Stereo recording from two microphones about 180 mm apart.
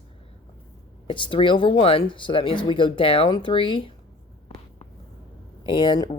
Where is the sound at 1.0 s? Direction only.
25° left (ahead or behind).